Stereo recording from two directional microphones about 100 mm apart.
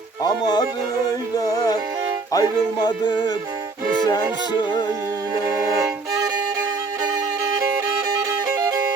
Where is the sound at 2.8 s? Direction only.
45° left (ahead or behind).